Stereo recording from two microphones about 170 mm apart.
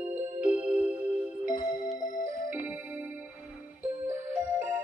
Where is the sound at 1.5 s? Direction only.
50° left (ahead or behind).